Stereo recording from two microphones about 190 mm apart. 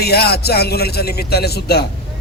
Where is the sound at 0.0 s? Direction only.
55° left (ahead or behind).